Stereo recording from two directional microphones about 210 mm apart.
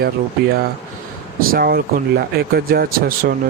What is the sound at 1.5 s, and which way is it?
Speech, 45° right (ahead or behind).